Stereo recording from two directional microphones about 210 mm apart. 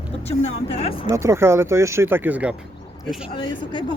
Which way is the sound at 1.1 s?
15° right (ahead or behind).